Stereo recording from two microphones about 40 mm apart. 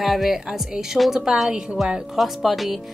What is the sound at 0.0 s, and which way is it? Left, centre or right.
Speech, centre.